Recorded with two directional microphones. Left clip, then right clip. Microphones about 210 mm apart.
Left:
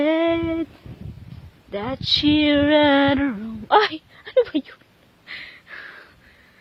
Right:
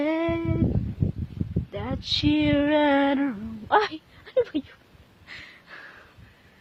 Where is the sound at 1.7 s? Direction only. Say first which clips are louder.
Left 7 dB; 30° left (ahead or behind).